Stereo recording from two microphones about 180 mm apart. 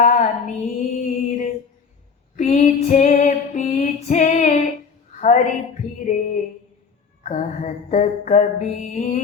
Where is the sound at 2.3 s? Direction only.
40° left (ahead or behind).